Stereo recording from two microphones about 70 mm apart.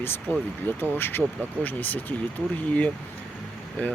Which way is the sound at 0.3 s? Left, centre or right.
Left.